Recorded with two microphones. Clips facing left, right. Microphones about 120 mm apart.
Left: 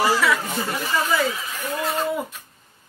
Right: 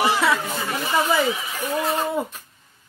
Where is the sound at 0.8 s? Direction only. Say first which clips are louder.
Right 3 dB; 25° right (ahead or behind).